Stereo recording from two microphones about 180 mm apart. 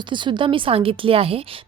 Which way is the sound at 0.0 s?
25° right (ahead or behind).